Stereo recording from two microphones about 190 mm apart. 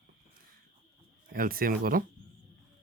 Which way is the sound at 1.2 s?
50° right (ahead or behind).